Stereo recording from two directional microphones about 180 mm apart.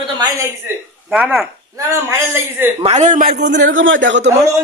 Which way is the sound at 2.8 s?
35° right (ahead or behind).